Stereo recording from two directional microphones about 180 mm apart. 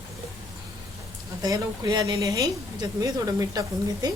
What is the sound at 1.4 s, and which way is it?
Speech, 20° right (ahead or behind).